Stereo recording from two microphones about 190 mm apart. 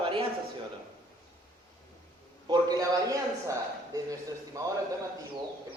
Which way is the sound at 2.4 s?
20° right (ahead or behind).